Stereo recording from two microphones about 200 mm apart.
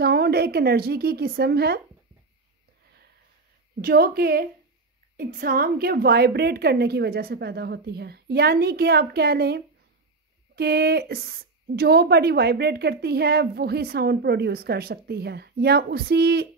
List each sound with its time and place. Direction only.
0.0 s speech: 55° right (ahead or behind)
3.8 s speech: 50° right (ahead or behind)